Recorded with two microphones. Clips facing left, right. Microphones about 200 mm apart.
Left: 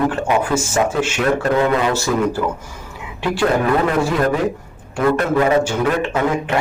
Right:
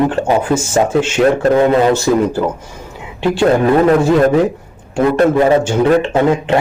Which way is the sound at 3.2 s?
25° right (ahead or behind).